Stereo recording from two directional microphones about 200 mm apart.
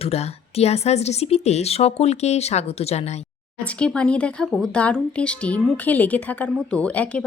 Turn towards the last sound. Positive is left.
turn(degrees=5)  # may be behind; listen again after turning